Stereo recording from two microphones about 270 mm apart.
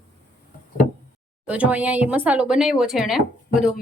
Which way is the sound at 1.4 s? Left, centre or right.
Centre.